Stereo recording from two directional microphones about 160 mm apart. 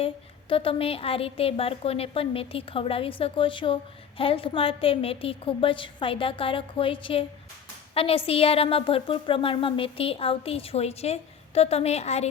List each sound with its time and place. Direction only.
0.0 s speech: 35° left (ahead or behind)